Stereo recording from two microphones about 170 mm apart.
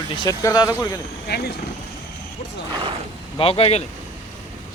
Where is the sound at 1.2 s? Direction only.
70° left (ahead or behind).